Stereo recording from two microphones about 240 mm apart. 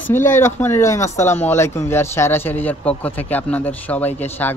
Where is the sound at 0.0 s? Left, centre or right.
Centre.